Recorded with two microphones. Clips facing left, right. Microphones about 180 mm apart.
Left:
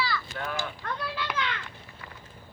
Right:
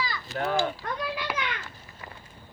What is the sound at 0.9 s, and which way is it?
Children playing, 15° right (ahead or behind).